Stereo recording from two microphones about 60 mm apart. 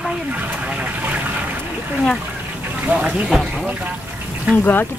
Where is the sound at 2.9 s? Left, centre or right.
Centre.